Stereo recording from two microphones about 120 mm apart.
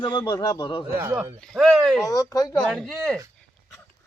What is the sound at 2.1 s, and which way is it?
Speech, 30° left (ahead or behind).